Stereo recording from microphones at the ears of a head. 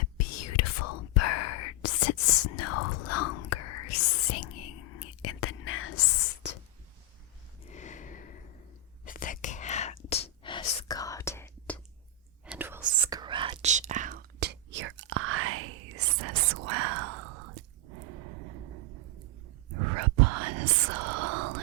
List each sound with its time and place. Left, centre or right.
0.0 s whispering: left
7.6 s snort: left
9.0 s whispering: left
12.8 s whispering: right